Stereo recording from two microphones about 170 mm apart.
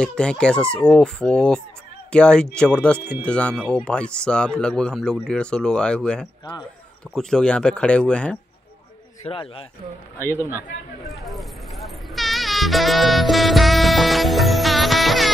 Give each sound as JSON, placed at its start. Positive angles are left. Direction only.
{"t": 0.0, "sound": "speech", "side_deg": 5}
{"t": 9.3, "sound": "speech", "side_deg": 30}
{"t": 11.2, "sound": "music", "side_deg": 0}